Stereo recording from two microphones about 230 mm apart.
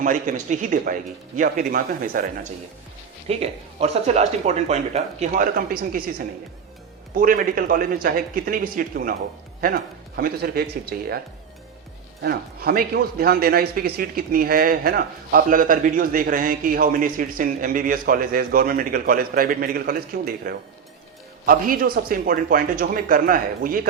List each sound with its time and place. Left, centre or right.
0.0 s a man's voice: right
12.2 s a man's voice: right